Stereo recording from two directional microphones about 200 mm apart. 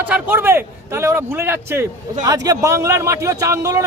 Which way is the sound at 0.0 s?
10° right (ahead or behind).